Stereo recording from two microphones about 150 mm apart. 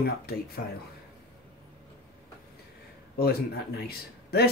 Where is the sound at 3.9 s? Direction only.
90° left.